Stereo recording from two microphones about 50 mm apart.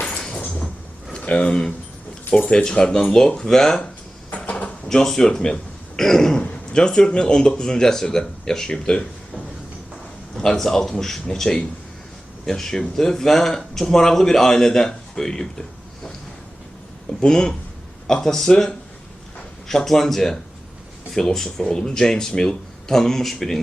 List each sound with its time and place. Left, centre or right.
0.3 s a sound: left
1.2 s speech: left
4.4 s a sound: left
4.9 s speech: centre
10.3 s speech: centre
17.2 s speech: centre